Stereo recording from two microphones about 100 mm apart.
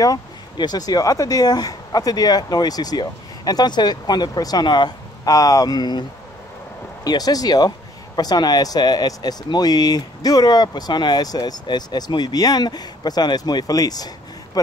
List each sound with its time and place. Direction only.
0.0 s speech: 40° left (ahead or behind)
7.1 s speech: 40° left (ahead or behind)